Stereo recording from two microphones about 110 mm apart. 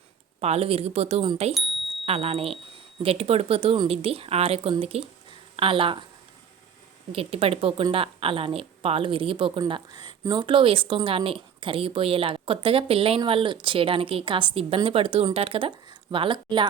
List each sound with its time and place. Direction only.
0.4 s a woman's voice: 70° right (ahead or behind); by 6.1 s 50° right (ahead or behind)
7.1 s a woman's voice: 55° right (ahead or behind)